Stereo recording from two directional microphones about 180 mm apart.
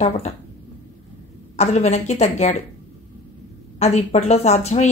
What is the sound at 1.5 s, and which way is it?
Speech, 40° left (ahead or behind).